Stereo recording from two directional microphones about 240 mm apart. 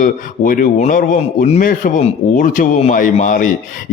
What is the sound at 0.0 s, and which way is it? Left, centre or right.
A man's voice, left.